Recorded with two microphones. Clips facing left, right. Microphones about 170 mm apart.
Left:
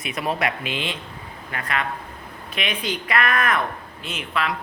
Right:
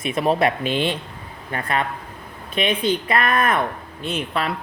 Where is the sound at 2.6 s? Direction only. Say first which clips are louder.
Right 7 dB; 30° right (ahead or behind).